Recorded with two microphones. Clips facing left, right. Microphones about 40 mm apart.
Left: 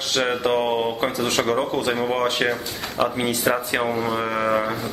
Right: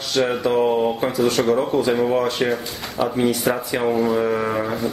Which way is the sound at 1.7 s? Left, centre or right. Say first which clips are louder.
Right 4 dB; left.